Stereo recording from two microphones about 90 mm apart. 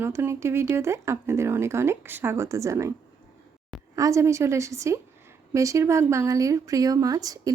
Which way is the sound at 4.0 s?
35° right (ahead or behind).